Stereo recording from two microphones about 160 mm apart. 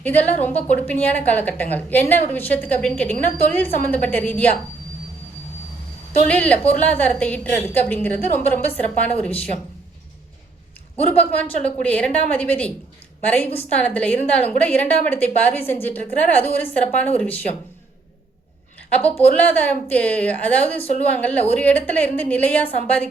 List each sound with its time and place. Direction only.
0.0 s a woman's voice: 10° left (ahead or behind)
6.2 s a woman's voice: 10° left (ahead or behind)
11.3 s a woman's voice: 10° left (ahead or behind)
18.9 s a woman's voice: 10° left (ahead or behind)